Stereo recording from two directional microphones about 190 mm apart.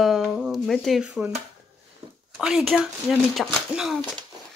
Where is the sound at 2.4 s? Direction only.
Centre (ahead or behind).